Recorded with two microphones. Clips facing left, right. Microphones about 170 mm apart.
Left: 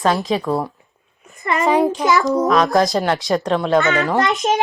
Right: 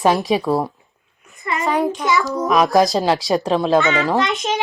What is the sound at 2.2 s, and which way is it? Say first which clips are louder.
Speech: left 5 dB; 20° left (ahead or behind).